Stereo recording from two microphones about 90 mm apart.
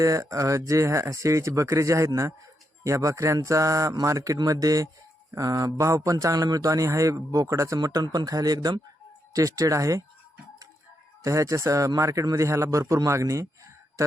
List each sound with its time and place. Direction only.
0.0 s a man's voice: 35° right (ahead or behind)
9.3 s a man's voice: 40° right (ahead or behind)
11.2 s a man's voice: 35° right (ahead or behind)